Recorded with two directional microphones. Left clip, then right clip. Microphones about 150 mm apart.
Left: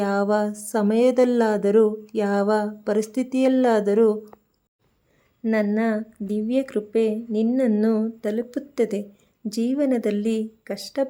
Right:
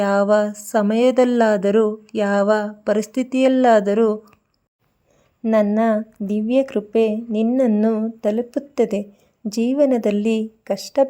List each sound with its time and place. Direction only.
0.0 s speech: 20° right (ahead or behind)
5.4 s speech: 20° right (ahead or behind)